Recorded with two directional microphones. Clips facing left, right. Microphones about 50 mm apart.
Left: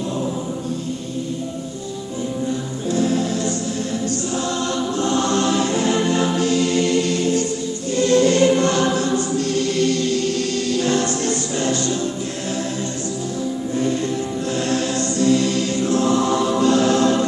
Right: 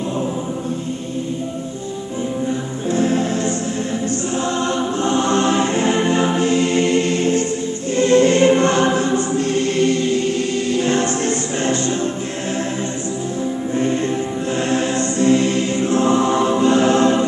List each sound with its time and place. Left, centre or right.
2.9 s music: right
7.9 s choir: right
14.5 s choir: right